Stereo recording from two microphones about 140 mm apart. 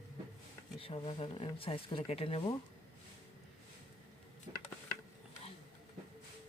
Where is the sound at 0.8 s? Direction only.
40° left (ahead or behind).